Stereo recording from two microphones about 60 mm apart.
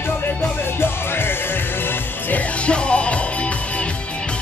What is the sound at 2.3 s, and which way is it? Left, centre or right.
Music, centre.